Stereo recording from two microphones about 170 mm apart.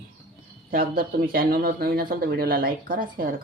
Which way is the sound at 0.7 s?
60° right (ahead or behind).